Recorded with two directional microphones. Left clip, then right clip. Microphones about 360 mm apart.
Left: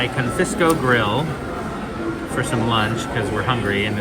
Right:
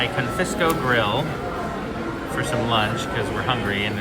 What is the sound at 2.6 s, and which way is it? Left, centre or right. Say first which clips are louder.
Speech: left 1 dB; centre.